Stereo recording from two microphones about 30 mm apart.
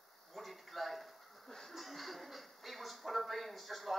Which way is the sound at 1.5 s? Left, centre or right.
Centre.